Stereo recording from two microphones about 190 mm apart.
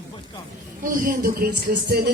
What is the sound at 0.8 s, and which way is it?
Speech, 45° right (ahead or behind).